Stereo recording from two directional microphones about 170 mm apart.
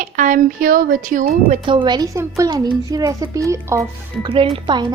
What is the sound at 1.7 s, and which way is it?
Speech, 25° right (ahead or behind).